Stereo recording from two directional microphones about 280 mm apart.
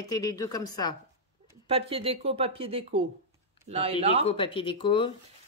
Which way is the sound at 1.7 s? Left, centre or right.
Centre.